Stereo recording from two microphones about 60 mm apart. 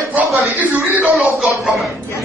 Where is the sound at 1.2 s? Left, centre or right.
Centre.